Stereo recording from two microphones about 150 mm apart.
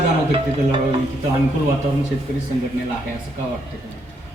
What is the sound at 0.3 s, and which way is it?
Music, 35° right (ahead or behind).